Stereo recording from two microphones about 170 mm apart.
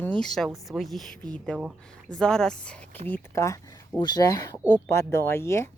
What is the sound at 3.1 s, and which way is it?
Speech, 15° left (ahead or behind).